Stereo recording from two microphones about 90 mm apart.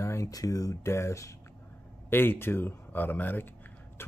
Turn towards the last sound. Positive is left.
turn(degrees=20)  # may be behind; listen again after turning